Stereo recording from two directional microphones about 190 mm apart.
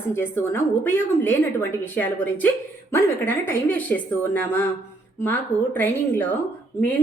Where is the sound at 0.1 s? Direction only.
10° left (ahead or behind).